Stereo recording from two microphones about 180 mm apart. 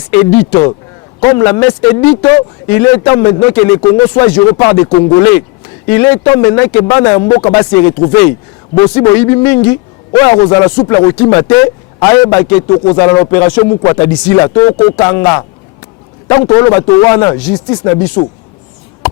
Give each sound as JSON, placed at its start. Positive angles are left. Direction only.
{"t": 1.2, "sound": "speech", "side_deg": 20}
{"t": 16.5, "sound": "speech", "side_deg": 20}